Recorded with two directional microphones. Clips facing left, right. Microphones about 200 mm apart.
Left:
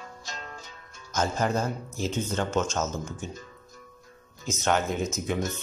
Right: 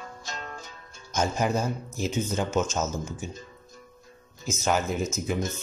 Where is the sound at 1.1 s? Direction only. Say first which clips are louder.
Right 1 dB; 10° right (ahead or behind).